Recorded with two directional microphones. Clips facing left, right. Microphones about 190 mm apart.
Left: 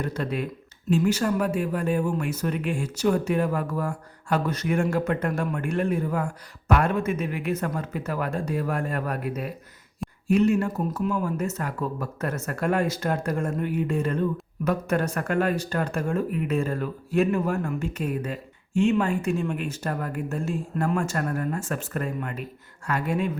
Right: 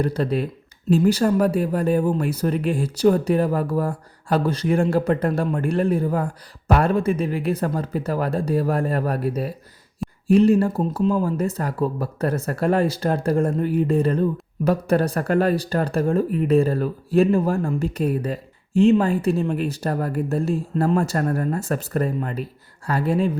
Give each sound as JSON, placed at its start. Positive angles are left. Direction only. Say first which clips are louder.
{"t": 0.0, "sound": "speech", "louder": "right 6 dB", "side_deg": -35}